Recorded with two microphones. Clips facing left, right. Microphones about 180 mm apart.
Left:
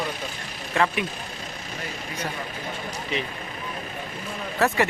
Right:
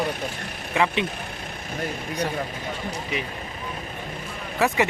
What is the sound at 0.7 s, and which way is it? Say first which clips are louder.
Speech: even; 15° right (ahead or behind).